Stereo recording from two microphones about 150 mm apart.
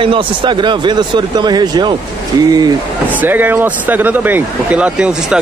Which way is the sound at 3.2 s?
10° right (ahead or behind).